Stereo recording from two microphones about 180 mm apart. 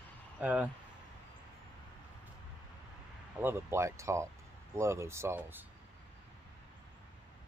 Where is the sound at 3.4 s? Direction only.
10° right (ahead or behind).